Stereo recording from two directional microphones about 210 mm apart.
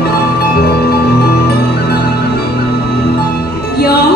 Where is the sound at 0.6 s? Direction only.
50° left (ahead or behind).